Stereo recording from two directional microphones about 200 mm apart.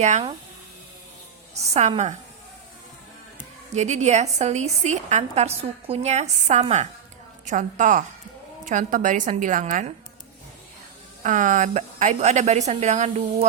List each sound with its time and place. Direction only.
0.0 s a woman's voice: 35° right (ahead or behind)
1.7 s a woman's voice: 35° right (ahead or behind)
3.7 s a woman's voice: 35° right (ahead or behind)
11.2 s a woman's voice: 40° right (ahead or behind)